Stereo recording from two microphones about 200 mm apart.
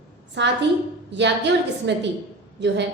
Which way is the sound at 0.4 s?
65° right (ahead or behind).